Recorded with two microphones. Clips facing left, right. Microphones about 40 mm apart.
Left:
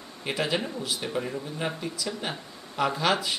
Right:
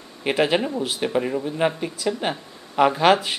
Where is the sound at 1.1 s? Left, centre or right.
Right.